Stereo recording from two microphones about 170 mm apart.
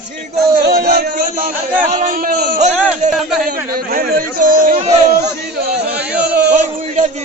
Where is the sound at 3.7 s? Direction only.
60° right (ahead or behind).